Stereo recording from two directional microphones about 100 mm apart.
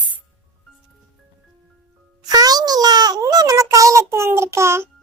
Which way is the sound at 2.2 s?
40° right (ahead or behind).